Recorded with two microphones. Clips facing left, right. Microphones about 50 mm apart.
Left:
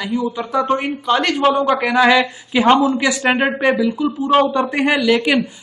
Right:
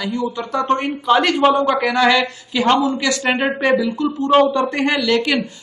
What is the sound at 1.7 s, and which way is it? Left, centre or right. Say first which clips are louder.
Speech: left 2 dB; centre.